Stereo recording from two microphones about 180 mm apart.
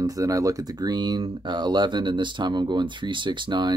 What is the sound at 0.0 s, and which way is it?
Speech, 20° right (ahead or behind).